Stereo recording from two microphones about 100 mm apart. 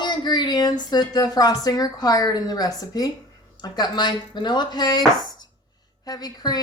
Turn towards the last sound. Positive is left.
turn(degrees=40)  # may be behind; listen again after turning